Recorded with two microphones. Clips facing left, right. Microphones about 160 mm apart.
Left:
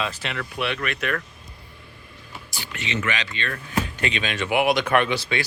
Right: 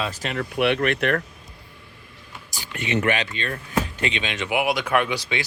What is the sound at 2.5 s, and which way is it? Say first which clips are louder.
Speech: right 4 dB; 45° right (ahead or behind).